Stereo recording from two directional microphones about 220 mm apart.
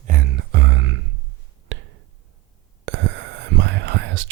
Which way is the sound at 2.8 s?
60° right (ahead or behind).